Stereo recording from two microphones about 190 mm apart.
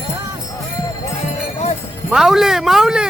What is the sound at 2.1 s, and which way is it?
Speech, centre (ahead or behind).